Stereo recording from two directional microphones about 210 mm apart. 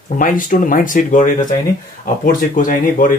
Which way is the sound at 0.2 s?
40° left (ahead or behind).